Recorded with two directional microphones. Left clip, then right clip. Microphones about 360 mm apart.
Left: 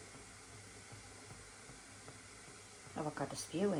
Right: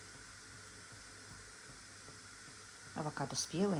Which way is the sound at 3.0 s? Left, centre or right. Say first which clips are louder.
Right 1 dB; right.